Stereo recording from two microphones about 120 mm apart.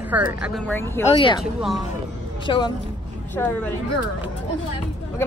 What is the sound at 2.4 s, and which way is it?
Speech, 40° left (ahead or behind).